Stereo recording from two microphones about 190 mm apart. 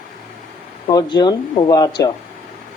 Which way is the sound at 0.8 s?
25° left (ahead or behind).